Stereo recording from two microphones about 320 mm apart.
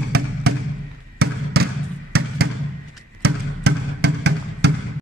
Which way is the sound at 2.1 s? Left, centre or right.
Right.